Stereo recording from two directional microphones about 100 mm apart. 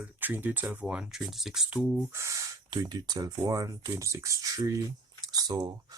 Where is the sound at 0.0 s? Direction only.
20° right (ahead or behind).